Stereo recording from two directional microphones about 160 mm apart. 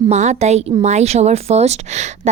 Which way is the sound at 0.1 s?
45° right (ahead or behind).